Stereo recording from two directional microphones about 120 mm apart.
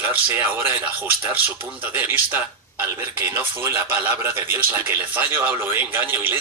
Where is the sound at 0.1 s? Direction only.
15° right (ahead or behind).